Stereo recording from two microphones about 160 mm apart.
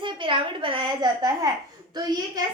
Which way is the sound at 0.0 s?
30° right (ahead or behind).